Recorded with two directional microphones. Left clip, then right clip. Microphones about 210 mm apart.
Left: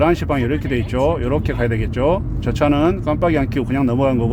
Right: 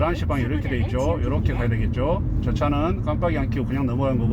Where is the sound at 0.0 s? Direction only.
50° left (ahead or behind).